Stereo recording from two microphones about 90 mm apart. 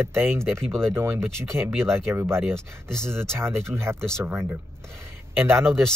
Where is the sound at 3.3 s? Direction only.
30° right (ahead or behind).